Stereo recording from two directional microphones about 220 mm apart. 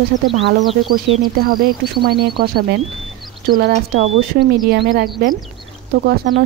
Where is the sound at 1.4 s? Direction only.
40° right (ahead or behind).